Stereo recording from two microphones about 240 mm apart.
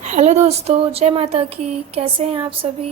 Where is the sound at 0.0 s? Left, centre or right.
Right.